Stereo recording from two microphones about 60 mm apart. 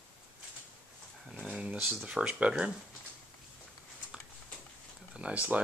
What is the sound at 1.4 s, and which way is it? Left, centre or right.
Speech, centre.